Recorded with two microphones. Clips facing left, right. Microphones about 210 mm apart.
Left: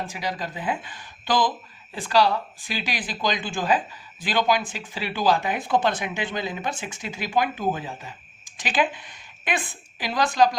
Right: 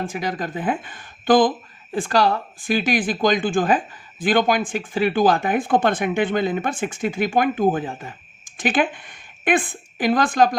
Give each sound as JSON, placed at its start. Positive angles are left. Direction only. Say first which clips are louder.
{"t": 0.0, "sound": "a woman's voice", "louder": "right 5 dB", "side_deg": -50}